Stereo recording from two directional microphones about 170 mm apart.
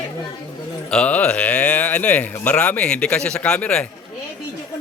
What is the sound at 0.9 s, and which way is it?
Speech, 5° left (ahead or behind).